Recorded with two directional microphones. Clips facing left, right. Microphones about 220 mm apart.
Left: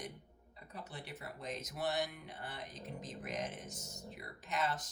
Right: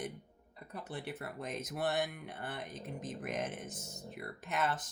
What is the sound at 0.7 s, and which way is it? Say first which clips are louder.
Speech: right 6 dB; 55° right (ahead or behind).